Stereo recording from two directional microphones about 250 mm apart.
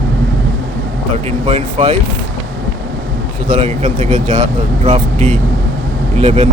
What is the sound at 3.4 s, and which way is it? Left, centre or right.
Speech, right.